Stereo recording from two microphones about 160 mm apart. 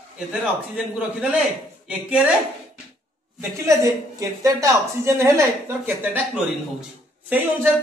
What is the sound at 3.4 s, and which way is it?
A woman's voice, 20° right (ahead or behind).